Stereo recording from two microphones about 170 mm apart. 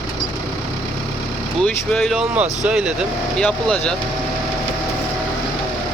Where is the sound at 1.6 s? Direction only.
5° left (ahead or behind).